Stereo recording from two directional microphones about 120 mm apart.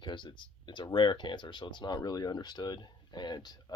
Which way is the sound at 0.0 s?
40° left (ahead or behind).